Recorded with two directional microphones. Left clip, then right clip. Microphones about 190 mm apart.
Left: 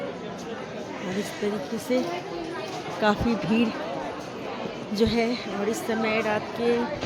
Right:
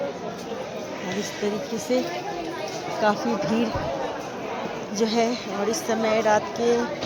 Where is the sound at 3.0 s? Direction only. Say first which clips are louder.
Right 1 dB; 25° left (ahead or behind).